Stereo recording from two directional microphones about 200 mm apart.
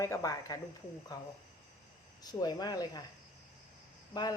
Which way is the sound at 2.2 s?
20° left (ahead or behind).